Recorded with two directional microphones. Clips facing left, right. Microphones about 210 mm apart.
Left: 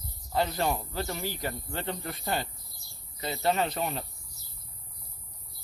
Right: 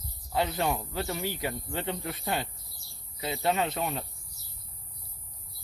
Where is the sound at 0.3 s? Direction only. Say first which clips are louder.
Even; centre (ahead or behind).